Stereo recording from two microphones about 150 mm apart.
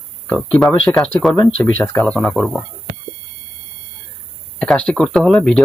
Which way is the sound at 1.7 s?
10° left (ahead or behind).